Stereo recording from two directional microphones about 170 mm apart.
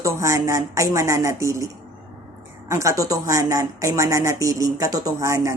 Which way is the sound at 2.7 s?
15° right (ahead or behind).